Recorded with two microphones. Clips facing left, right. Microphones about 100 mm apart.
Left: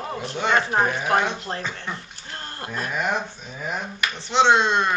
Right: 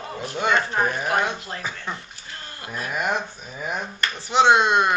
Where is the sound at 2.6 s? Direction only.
10° right (ahead or behind).